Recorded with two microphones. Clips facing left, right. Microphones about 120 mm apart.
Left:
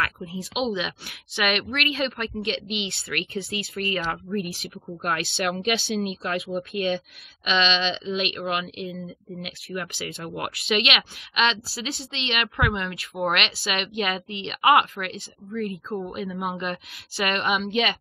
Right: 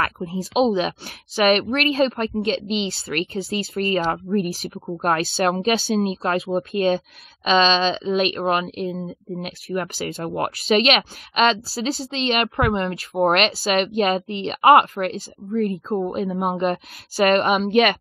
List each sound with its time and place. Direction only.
0.2 s speech: 35° right (ahead or behind); by 17.9 s 50° right (ahead or behind)